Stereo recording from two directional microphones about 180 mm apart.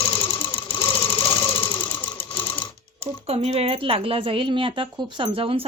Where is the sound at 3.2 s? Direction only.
35° right (ahead or behind).